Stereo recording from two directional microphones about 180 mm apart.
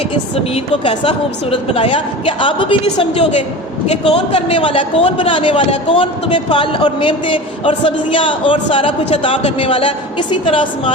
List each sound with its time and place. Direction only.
0.5 s a man's voice: 30° left (ahead or behind)